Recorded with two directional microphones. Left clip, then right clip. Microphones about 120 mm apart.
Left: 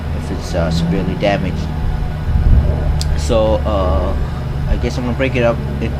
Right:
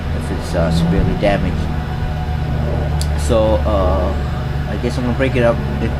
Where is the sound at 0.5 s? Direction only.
25° left (ahead or behind).